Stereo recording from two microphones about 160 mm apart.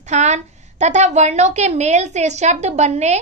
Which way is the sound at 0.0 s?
45° right (ahead or behind).